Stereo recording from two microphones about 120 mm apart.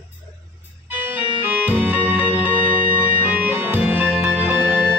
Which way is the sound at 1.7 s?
15° right (ahead or behind).